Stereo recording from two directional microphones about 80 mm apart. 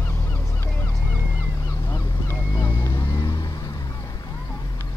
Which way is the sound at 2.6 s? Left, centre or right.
Left.